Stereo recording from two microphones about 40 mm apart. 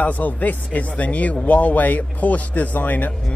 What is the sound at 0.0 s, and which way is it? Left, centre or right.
A man's voice, left.